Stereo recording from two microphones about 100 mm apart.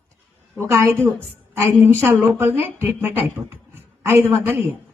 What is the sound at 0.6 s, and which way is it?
A man's voice, 25° right (ahead or behind).